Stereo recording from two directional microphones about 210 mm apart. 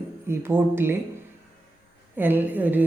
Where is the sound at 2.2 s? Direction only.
10° right (ahead or behind).